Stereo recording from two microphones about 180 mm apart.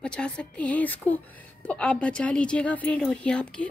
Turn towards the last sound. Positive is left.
turn(degrees=5)  # may be behind; listen again after turning